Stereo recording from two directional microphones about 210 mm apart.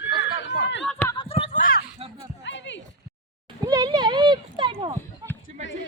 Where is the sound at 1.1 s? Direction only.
25° left (ahead or behind); by 1.8 s 40° left (ahead or behind).